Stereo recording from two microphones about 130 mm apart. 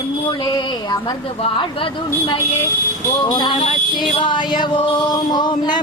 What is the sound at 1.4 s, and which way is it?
Speech, 40° left (ahead or behind).